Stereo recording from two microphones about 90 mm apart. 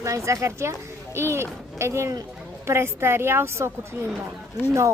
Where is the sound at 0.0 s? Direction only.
35° right (ahead or behind).